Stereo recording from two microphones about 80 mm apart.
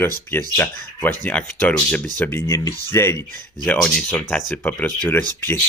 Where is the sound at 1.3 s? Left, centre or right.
Centre.